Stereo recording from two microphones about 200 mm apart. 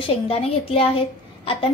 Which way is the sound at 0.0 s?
30° left (ahead or behind).